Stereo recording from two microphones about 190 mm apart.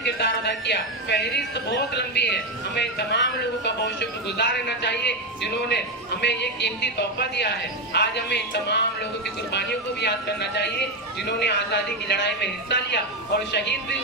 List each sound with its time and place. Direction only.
0.0 s a man's voice: 65° left (ahead or behind)